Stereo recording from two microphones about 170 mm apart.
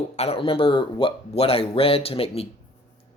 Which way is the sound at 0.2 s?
35° left (ahead or behind).